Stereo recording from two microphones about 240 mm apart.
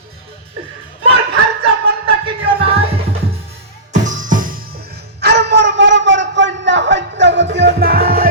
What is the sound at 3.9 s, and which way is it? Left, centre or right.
Music, right.